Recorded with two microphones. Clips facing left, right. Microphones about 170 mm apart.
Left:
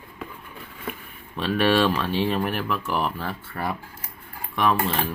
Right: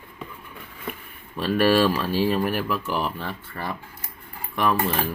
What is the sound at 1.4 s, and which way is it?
Speech, 5° right (ahead or behind).